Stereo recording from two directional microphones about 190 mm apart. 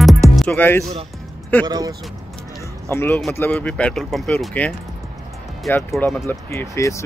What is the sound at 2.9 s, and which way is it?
Speech, 10° left (ahead or behind).